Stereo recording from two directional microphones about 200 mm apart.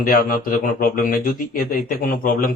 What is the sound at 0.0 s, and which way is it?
Speech, 45° left (ahead or behind).